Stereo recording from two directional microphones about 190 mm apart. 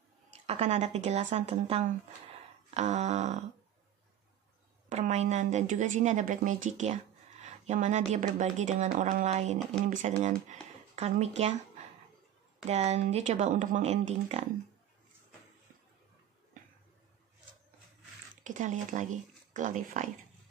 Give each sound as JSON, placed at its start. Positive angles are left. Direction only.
{"t": 0.5, "sound": "speech", "side_deg": -35}
{"t": 4.8, "sound": "speech", "side_deg": -35}
{"t": 12.6, "sound": "speech", "side_deg": -35}
{"t": 18.4, "sound": "speech", "side_deg": -40}